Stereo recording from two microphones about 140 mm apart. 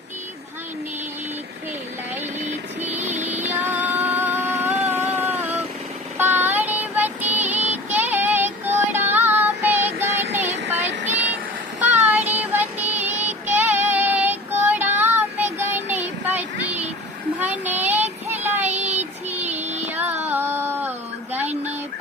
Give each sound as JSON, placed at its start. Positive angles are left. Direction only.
{"t": 3.2, "sound": "music", "side_deg": -55}
{"t": 3.6, "sound": "music", "side_deg": -15}
{"t": 6.1, "sound": "child singing", "side_deg": -15}
{"t": 10.7, "sound": "child singing", "side_deg": -55}
{"t": 11.8, "sound": "child singing", "side_deg": -10}
{"t": 19.8, "sound": "music", "side_deg": -10}
{"t": 21.5, "sound": "a sound", "side_deg": -55}